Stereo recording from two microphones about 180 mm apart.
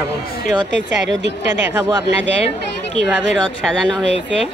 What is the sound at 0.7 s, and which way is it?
Speech, 80° right.